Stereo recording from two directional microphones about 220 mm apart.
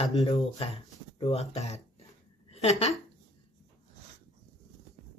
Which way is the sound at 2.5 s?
30° left (ahead or behind).